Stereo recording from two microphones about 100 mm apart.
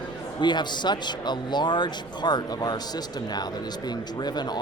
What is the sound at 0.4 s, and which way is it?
Speech, 50° left (ahead or behind).